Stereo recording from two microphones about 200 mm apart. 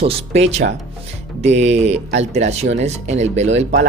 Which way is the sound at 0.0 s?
30° right (ahead or behind).